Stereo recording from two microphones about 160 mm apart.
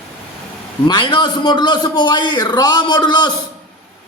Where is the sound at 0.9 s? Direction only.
30° left (ahead or behind).